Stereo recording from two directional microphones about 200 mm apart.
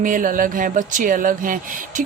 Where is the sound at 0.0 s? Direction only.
40° right (ahead or behind).